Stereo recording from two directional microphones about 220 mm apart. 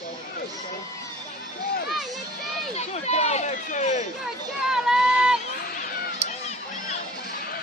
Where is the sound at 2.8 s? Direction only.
30° left (ahead or behind).